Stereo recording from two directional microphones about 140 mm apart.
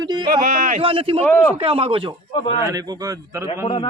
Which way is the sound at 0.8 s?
40° right (ahead or behind).